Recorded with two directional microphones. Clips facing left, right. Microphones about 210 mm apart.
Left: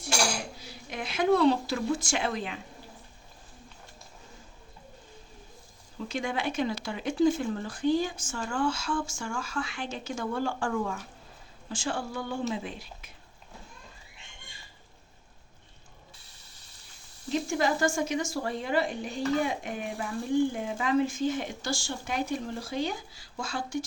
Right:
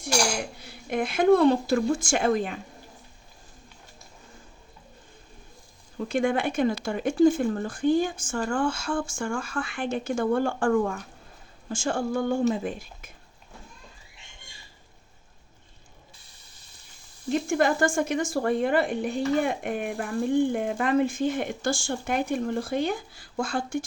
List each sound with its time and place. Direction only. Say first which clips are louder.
0.6 s speech: right 9 dB; 55° right (ahead or behind)
6.0 s speech: right 7 dB; 55° right (ahead or behind)
17.5 s speech: right 4 dB; 55° right (ahead or behind)